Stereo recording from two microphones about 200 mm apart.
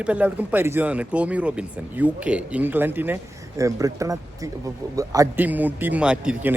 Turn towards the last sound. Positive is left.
turn(degrees=-5)  # may be behind; listen again after turning